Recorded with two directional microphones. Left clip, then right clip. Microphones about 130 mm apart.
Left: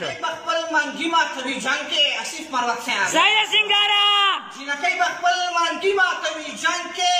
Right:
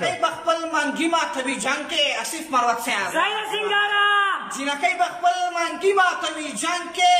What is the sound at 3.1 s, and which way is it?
A man's voice, 20° left (ahead or behind).